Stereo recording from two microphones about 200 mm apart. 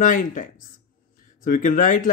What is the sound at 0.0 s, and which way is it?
Speech, 40° left (ahead or behind).